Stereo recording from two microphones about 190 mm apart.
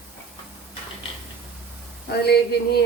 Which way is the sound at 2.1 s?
60° left (ahead or behind).